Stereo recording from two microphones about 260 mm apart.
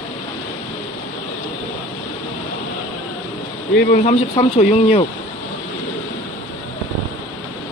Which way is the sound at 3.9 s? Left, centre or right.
Left.